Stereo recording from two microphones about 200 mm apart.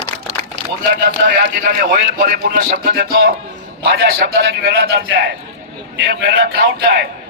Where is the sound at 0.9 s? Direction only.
45° right (ahead or behind).